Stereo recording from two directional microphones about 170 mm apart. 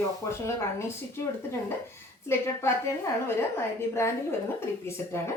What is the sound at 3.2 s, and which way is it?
Speech, 15° left (ahead or behind).